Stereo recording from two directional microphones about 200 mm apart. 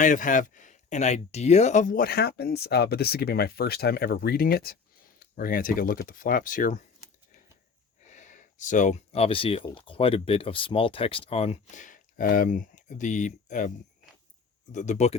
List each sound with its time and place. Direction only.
0.0 s speech: 40° left (ahead or behind)
8.1 s speech: 40° left (ahead or behind)